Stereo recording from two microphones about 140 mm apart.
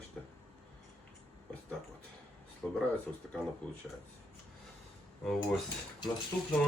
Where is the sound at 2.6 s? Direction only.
5° left (ahead or behind).